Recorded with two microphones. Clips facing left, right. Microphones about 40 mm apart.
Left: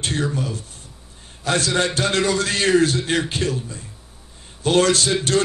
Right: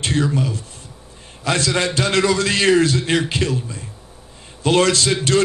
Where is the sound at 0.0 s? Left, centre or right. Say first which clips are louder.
Right 4 dB; right.